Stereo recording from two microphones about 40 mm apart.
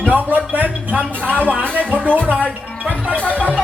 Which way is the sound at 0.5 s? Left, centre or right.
Right.